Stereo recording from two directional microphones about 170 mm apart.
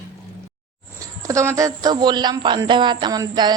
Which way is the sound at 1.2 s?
15° right (ahead or behind).